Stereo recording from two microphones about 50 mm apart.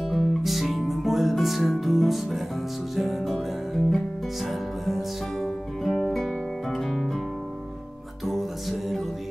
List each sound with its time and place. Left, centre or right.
0.0 s music: centre
0.4 s music: centre
8.3 s music: centre